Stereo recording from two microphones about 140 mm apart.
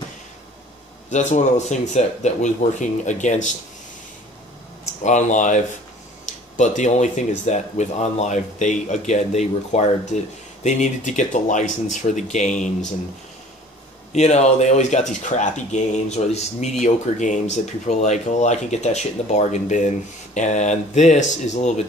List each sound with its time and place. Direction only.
1.1 s speech: 60° left (ahead or behind)
5.0 s speech: 60° left (ahead or behind)
14.1 s speech: 55° left (ahead or behind)